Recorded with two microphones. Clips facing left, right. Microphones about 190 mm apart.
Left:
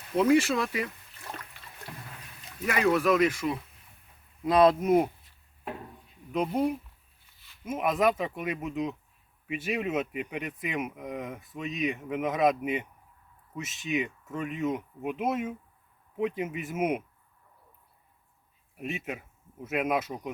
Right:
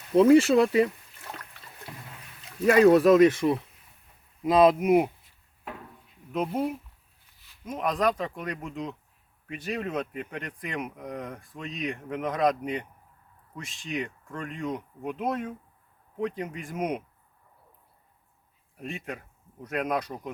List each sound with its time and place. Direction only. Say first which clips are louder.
0.2 s speech: right 6 dB; 30° right (ahead or behind)
2.6 s speech: right 7 dB; 30° right (ahead or behind)
4.4 s speech: right 2 dB; 15° right (ahead or behind)
6.3 s speech: left 1 dB; 5° right (ahead or behind)
18.8 s speech: left 1 dB; 5° left (ahead or behind)